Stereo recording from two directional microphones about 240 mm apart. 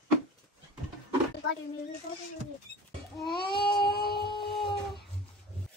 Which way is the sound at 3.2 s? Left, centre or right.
Left.